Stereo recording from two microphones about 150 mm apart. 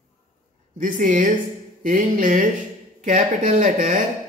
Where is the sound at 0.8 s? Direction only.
60° right (ahead or behind).